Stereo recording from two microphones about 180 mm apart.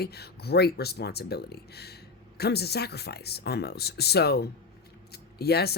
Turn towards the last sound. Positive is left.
turn(degrees=65)  # may be behind; listen again after turning